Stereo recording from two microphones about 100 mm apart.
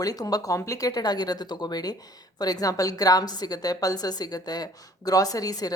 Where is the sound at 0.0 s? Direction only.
40° left (ahead or behind).